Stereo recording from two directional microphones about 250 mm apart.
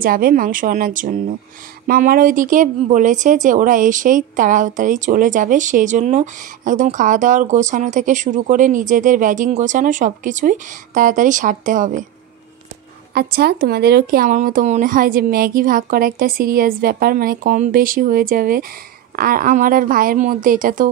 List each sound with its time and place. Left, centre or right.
0.0 s speech: right
13.1 s speech: right